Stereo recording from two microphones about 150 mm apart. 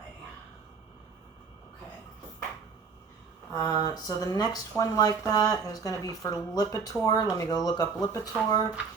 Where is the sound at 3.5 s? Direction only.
20° left (ahead or behind).